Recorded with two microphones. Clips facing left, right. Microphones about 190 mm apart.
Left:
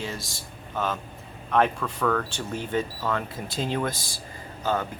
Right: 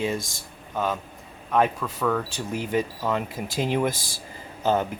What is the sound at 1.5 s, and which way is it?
A man's voice, 10° right (ahead or behind).